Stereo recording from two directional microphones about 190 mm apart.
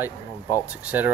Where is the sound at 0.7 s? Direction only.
5° right (ahead or behind).